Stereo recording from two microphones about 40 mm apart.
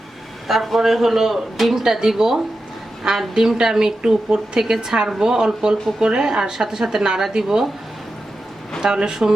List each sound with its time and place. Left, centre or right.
0.4 s speech: centre
8.8 s speech: centre